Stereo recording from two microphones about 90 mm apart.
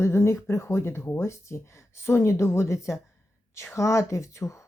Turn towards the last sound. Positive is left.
turn(degrees=35)  # may be behind; listen again after turning